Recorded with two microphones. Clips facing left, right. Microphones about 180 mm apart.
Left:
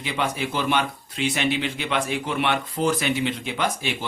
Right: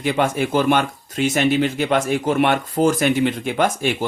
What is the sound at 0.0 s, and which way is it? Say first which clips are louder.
Speech: right 7 dB; 50° right (ahead or behind).